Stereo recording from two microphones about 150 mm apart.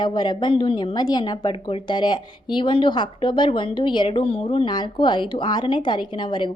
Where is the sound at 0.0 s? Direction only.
30° left (ahead or behind).